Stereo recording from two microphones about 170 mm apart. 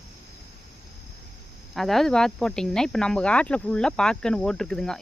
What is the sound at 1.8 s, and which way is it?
Speech, centre (ahead or behind).